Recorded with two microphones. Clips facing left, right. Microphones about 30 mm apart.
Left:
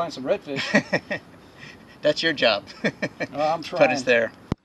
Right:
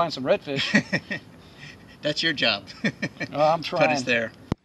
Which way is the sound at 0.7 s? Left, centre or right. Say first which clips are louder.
Left 4 dB; centre.